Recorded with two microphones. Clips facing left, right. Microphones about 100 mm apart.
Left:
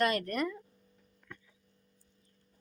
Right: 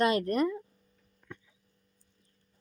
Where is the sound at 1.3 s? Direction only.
20° right (ahead or behind).